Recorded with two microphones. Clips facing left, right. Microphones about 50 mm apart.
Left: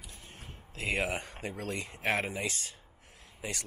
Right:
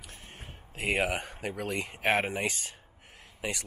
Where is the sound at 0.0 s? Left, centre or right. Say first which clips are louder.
Right 2 dB; right.